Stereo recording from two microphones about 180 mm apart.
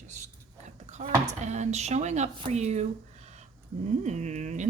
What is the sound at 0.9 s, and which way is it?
Speech, 40° right (ahead or behind).